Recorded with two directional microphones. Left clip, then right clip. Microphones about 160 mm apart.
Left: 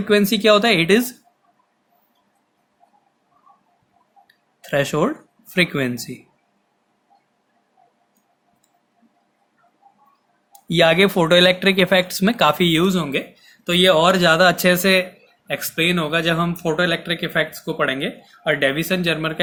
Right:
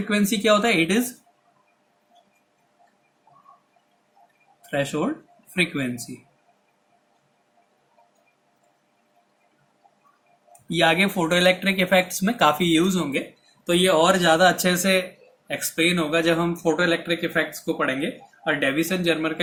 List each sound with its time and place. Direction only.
0.1 s speech: 50° left (ahead or behind)
4.7 s speech: 70° left (ahead or behind)
10.8 s speech: 65° left (ahead or behind)